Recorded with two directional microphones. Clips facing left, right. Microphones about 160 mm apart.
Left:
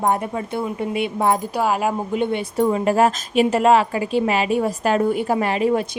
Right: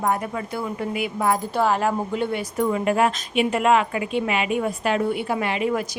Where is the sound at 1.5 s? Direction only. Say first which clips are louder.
Left 1 dB; 10° left (ahead or behind); by 5.8 s 35° left (ahead or behind).